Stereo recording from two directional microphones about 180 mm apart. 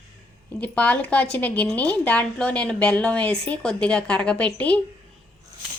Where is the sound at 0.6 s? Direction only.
10° left (ahead or behind).